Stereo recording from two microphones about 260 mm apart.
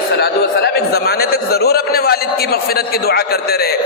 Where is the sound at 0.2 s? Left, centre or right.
Left.